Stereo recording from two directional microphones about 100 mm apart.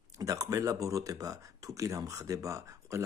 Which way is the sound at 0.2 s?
35° right (ahead or behind).